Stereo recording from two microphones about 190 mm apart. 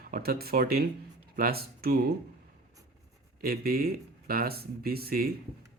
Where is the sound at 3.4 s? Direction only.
50° right (ahead or behind).